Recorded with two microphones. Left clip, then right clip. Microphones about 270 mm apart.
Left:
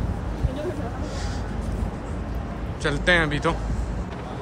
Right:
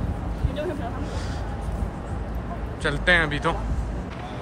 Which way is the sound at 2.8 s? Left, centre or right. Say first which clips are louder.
Even; centre.